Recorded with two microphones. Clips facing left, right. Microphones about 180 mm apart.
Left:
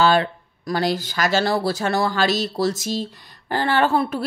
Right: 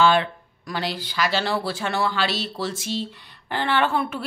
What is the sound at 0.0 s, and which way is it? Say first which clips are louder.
Speech: left 1 dB; 40° left (ahead or behind).